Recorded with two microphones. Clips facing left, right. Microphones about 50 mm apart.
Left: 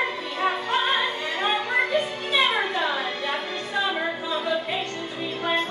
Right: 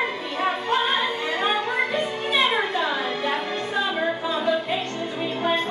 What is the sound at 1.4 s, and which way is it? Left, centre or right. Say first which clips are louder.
Music: left 1 dB; centre.